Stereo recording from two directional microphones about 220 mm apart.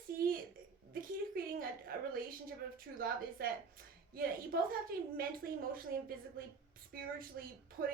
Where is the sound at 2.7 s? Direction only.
40° right (ahead or behind).